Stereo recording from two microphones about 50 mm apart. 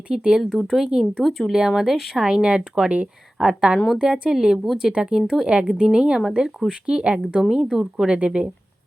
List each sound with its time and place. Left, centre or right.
0.1 s a woman's voice: centre
0.5 s speech: centre
0.9 s a woman's voice: centre
1.2 s speech: centre
1.5 s a woman's voice: centre
7.3 s a woman's voice: centre